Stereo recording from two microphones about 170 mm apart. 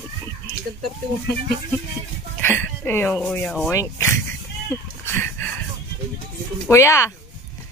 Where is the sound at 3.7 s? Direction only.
15° left (ahead or behind).